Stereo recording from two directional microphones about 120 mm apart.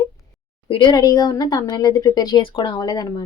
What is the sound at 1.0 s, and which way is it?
Speech, 30° left (ahead or behind).